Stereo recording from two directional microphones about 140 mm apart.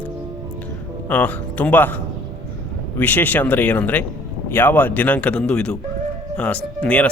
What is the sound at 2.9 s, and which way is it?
Speech, 10° left (ahead or behind).